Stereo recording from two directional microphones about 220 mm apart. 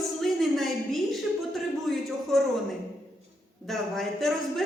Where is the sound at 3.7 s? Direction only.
Centre (ahead or behind).